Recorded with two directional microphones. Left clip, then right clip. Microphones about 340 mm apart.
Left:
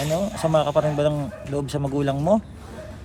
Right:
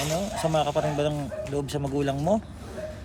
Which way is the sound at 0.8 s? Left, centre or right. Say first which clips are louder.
Left 5 dB; centre.